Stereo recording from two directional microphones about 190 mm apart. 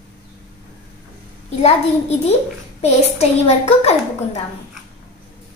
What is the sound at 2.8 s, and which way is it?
A child's voice, 35° left (ahead or behind).